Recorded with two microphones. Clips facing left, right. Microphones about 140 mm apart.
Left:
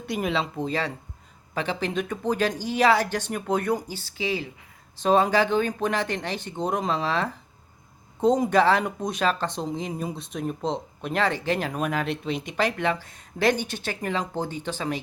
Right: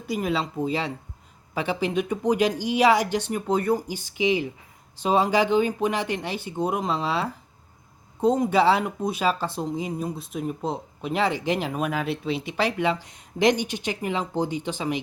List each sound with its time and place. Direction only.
0.1 s speech: centre (ahead or behind)
3.8 s speech: 15° right (ahead or behind)